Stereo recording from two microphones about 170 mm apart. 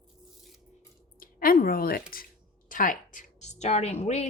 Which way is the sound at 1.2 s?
60° left (ahead or behind).